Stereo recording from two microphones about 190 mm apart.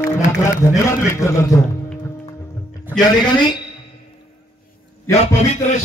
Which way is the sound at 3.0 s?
20° left (ahead or behind).